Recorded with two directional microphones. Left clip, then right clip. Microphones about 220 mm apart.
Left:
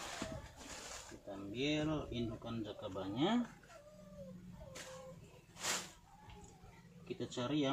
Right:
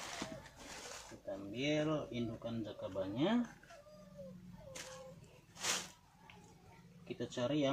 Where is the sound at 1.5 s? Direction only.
15° right (ahead or behind).